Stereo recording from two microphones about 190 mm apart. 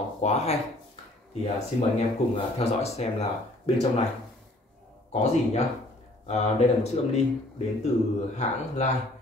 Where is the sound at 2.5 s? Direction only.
35° left (ahead or behind).